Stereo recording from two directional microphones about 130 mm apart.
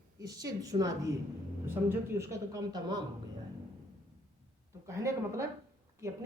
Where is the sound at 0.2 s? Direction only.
30° right (ahead or behind).